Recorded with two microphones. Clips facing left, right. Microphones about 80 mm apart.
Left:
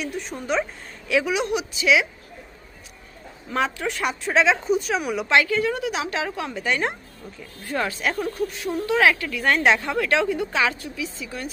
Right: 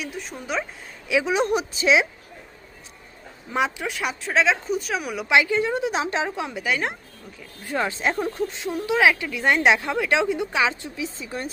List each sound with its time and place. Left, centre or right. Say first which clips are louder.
0.0 s speech: left 3 dB; centre
1.2 s a woman's voice: right 2 dB; right
3.5 s speech: even; centre
3.8 s speech: left 2 dB; centre
5.3 s a woman's voice: right 1 dB; right
6.7 s speech: left 1 dB; centre
7.6 s a woman's voice: right 1 dB; centre